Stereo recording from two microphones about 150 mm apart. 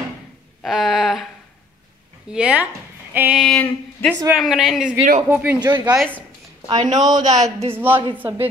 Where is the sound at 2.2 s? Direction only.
5° right (ahead or behind).